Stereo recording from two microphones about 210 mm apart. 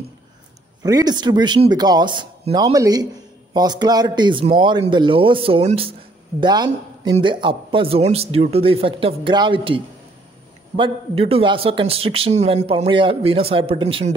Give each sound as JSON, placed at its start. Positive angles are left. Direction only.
{"t": 0.8, "sound": "speech", "side_deg": -20}
{"t": 10.8, "sound": "speech", "side_deg": -25}